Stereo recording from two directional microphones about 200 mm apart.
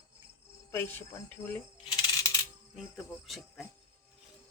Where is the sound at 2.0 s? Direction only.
15° left (ahead or behind).